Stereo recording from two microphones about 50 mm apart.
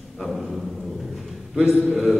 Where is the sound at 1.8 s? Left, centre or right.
Centre.